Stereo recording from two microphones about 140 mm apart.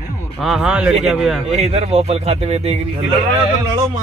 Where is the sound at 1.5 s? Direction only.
50° right (ahead or behind).